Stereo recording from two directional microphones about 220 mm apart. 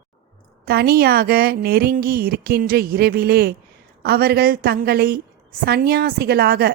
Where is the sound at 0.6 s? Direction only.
45° right (ahead or behind).